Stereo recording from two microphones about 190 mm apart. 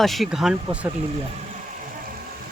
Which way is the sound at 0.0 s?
Centre (ahead or behind).